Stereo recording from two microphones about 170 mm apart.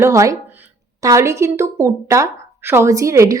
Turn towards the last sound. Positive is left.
turn(degrees=-15)  # may be behind; listen again after turning